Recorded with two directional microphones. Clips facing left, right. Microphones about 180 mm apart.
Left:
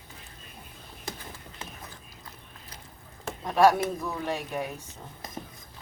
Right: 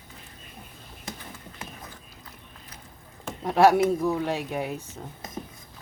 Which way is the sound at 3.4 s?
15° right (ahead or behind).